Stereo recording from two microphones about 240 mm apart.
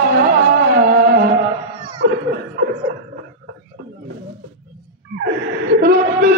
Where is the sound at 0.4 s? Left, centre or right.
Right.